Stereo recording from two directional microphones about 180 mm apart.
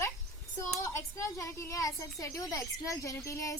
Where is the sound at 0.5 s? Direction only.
15° left (ahead or behind).